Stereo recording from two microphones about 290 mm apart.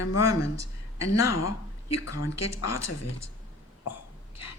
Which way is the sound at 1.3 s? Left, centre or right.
Left.